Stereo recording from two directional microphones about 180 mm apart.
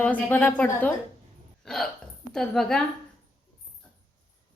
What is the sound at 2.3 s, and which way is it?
Speech, 5° left (ahead or behind).